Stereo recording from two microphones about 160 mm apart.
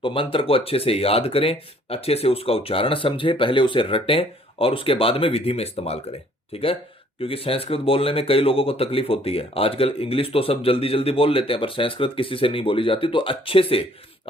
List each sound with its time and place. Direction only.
0.0 s speech: 35° left (ahead or behind)